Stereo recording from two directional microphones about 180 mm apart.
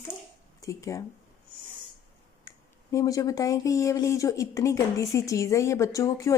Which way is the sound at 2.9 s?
20° left (ahead or behind).